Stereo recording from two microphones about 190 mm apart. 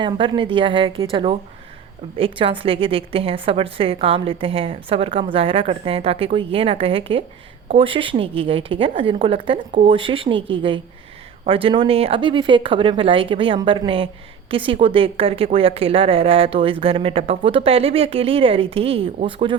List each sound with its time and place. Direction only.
0.0 s a woman's voice: 25° right (ahead or behind)